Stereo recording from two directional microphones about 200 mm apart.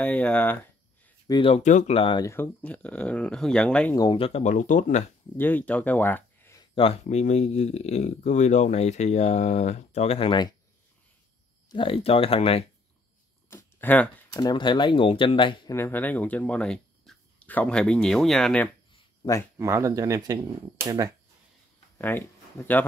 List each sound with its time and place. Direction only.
0.0 s speech: 5° left (ahead or behind)
1.2 s speech: 25° left (ahead or behind)
2.2 s speech: 10° left (ahead or behind)
3.9 s speech: 20° left (ahead or behind); by 5.0 s 40° left (ahead or behind)
5.4 s speech: 10° left (ahead or behind); by 10.5 s 25° left (ahead or behind)
11.7 s speech: 25° left (ahead or behind)
13.5 s a sound: 10° left (ahead or behind)
14.3 s speech: 20° left (ahead or behind)
15.7 s speech: 10° left (ahead or behind)
19.6 s speech: 15° right (ahead or behind)
21.9 s speech: 10° left (ahead or behind)